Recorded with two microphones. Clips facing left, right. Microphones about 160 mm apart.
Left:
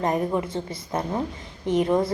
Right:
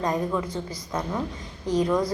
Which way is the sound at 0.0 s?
25° left (ahead or behind).